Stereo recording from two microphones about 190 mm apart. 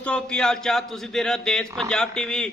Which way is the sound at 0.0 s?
5° left (ahead or behind).